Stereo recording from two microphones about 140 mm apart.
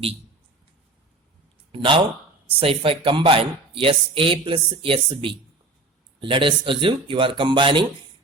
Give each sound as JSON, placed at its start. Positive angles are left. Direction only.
{"t": 1.7, "sound": "speech", "side_deg": -40}